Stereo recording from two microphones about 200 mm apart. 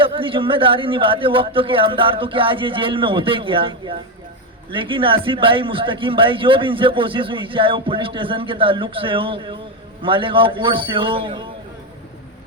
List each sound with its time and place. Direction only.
0.0 s a man's voice: 25° right (ahead or behind)